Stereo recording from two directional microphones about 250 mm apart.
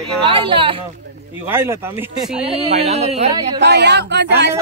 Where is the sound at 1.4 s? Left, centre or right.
Centre.